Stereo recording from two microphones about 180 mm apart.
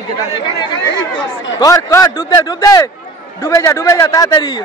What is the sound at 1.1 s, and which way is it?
Speech, 90° left.